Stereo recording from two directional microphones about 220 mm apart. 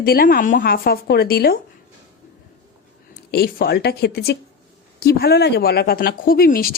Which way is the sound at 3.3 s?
45° left (ahead or behind).